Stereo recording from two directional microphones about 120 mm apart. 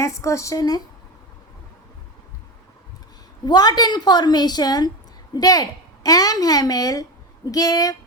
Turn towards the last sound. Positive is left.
turn(degrees=30)  # may be behind; listen again after turning